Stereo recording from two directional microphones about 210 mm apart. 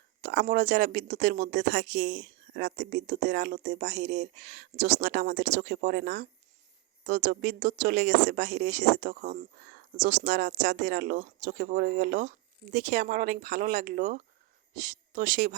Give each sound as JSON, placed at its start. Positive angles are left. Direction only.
{"t": 0.2, "sound": "speech", "side_deg": -45}
{"t": 9.0, "sound": "speech", "side_deg": -40}
{"t": 10.1, "sound": "speech", "side_deg": -55}